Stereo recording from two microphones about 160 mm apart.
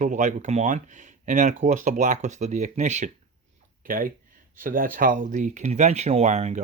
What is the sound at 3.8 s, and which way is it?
Speech, 60° right (ahead or behind).